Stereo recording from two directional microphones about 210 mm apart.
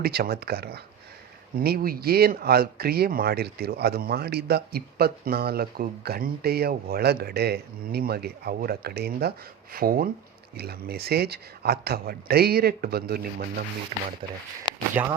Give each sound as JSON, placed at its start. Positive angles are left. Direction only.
{"t": 0.0, "sound": "speech", "side_deg": -45}
{"t": 15.0, "sound": "speech", "side_deg": -5}